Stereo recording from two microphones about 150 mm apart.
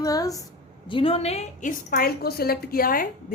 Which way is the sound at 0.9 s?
35° left (ahead or behind).